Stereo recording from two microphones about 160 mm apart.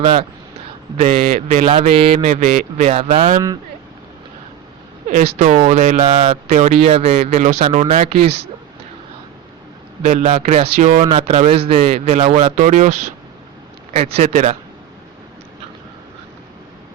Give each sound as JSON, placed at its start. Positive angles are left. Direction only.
{"t": 0.0, "sound": "speech", "side_deg": -35}
{"t": 0.9, "sound": "a man's voice", "side_deg": -50}
{"t": 5.0, "sound": "a man's voice", "side_deg": -50}
{"t": 6.1, "sound": "a man's voice", "side_deg": -35}
{"t": 10.0, "sound": "a man's voice", "side_deg": -45}